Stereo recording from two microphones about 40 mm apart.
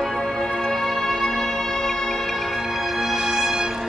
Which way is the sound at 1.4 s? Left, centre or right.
Centre.